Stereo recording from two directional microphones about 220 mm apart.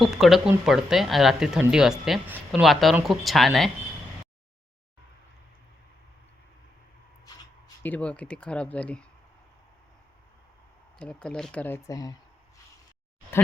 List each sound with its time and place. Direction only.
0.0 s speech: centre (ahead or behind)
7.3 s a sound: 15° left (ahead or behind)
7.8 s speech: 5° left (ahead or behind)
10.9 s speech: 5° left (ahead or behind)